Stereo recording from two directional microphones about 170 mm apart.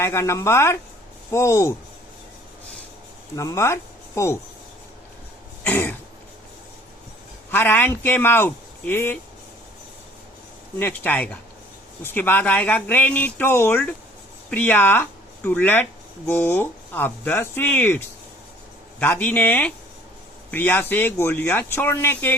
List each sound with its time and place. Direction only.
0.0 s speech: 15° left (ahead or behind)
3.3 s speech: 15° left (ahead or behind)
5.6 s speech: 15° left (ahead or behind)
7.5 s speech: 10° left (ahead or behind)
10.8 s speech: 10° left (ahead or behind)